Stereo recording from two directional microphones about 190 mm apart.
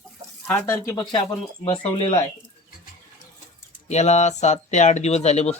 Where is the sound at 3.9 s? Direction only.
35° left (ahead or behind).